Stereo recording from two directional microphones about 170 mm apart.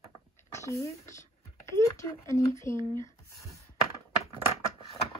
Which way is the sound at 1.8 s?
15° left (ahead or behind).